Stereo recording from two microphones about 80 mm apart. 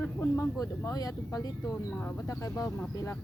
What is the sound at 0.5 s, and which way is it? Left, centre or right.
Speech, left.